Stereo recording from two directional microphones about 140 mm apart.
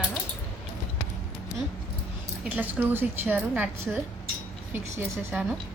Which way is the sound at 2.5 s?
10° right (ahead or behind).